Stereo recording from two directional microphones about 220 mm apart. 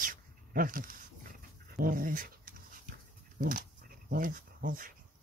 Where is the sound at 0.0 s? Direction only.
40° right (ahead or behind).